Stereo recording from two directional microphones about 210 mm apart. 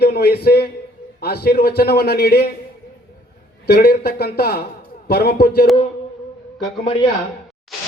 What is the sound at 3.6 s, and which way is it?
Speech, 50° left (ahead or behind).